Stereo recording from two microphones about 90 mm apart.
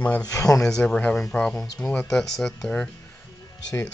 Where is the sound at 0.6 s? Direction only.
5° left (ahead or behind).